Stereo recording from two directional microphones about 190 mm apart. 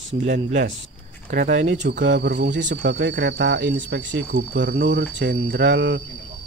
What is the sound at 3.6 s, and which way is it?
Speech, 50° right (ahead or behind).